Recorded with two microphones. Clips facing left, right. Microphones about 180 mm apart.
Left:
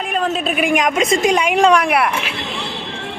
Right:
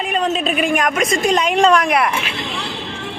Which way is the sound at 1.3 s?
10° left (ahead or behind).